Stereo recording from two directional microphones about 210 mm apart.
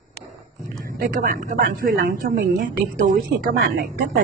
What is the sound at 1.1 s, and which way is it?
Speech, 40° right (ahead or behind).